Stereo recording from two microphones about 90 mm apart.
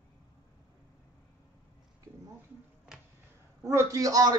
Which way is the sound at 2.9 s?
10° right (ahead or behind).